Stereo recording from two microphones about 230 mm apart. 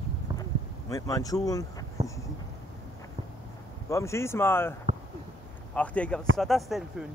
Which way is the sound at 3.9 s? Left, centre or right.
Centre.